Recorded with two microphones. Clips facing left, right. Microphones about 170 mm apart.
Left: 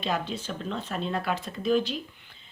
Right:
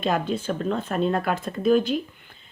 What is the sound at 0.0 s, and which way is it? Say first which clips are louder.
Speech: right 6 dB; 50° right (ahead or behind).